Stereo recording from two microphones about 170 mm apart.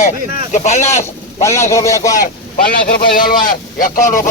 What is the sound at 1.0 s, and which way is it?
Speech, 15° left (ahead or behind).